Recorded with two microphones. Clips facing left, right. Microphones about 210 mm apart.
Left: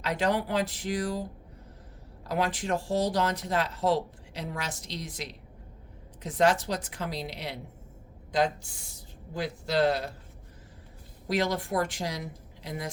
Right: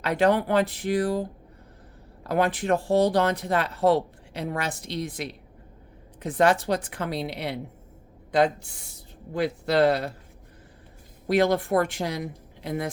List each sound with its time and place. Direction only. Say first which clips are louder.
0.0 s speech: right 6 dB; 55° right (ahead or behind)
11.3 s speech: right 7 dB; 55° right (ahead or behind)